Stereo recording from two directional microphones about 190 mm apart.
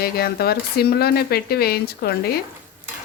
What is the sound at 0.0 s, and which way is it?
Speech, 55° left (ahead or behind).